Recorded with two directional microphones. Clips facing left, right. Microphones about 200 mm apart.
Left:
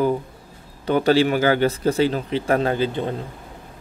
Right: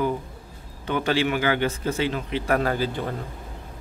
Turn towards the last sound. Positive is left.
turn(degrees=25)  # may be behind; listen again after turning